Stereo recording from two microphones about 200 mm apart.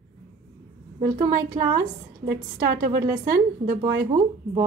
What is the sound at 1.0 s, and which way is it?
Speech, 20° right (ahead or behind).